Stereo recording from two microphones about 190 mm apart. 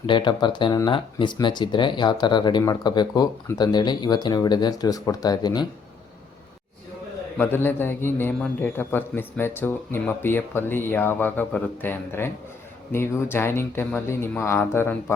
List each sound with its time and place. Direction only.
0.0 s speech: 25° left (ahead or behind)
7.3 s a man's voice: 10° left (ahead or behind)